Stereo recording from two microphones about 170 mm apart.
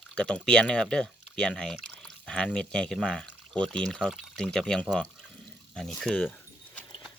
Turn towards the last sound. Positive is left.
turn(degrees=5)  # may be behind; listen again after turning